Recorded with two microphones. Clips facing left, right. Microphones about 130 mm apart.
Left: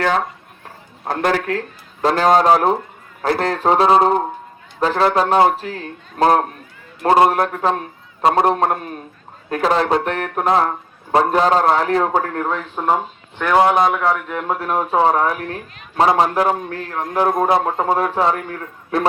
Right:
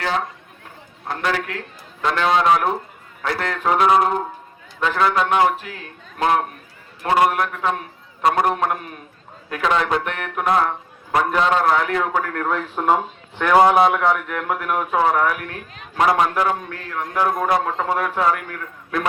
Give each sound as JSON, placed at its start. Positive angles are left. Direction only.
{"t": 1.0, "sound": "speech", "side_deg": 45}
{"t": 12.8, "sound": "a man's voice", "side_deg": 5}
{"t": 14.3, "sound": "speech", "side_deg": 25}